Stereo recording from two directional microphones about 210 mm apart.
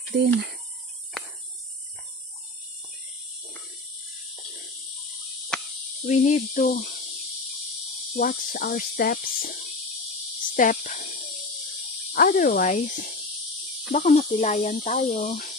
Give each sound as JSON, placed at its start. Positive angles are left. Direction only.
{"t": 0.1, "sound": "speech", "side_deg": -50}
{"t": 6.1, "sound": "speech", "side_deg": 35}
{"t": 8.1, "sound": "speech", "side_deg": 45}
{"t": 12.1, "sound": "speech", "side_deg": 45}